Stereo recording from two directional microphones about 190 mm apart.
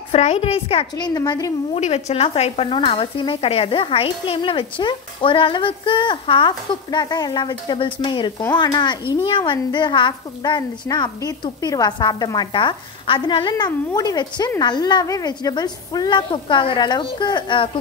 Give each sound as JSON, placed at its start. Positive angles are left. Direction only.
{"t": 0.1, "sound": "a woman's voice", "side_deg": 35}
{"t": 1.8, "sound": "stir", "side_deg": 35}